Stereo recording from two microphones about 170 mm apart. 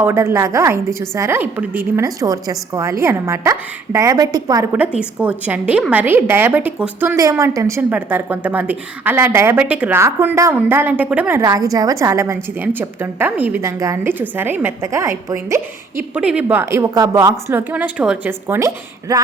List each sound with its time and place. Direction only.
0.0 s a woman's voice: 15° right (ahead or behind)
4.8 s a woman's voice: 5° right (ahead or behind)
11.4 s a woman's voice: 20° right (ahead or behind)